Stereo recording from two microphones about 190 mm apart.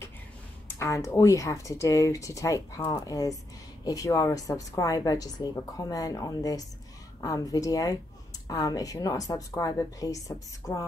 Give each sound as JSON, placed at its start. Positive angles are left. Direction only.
{"t": 0.7, "sound": "a woman's voice", "side_deg": 15}